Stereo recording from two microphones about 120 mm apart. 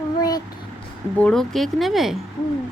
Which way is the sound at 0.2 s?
30° left (ahead or behind).